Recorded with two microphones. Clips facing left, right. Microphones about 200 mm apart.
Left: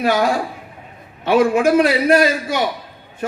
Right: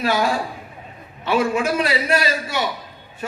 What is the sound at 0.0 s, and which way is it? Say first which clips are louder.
A man's voice: left 3 dB; 55° left (ahead or behind).